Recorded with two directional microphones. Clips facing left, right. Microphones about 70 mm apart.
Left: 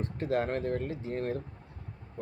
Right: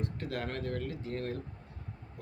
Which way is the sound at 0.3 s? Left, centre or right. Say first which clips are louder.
Left 7 dB; left.